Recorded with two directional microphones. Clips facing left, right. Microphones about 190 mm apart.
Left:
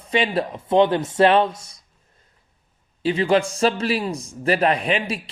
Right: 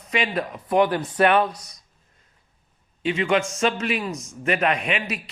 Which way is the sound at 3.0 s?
35° left (ahead or behind).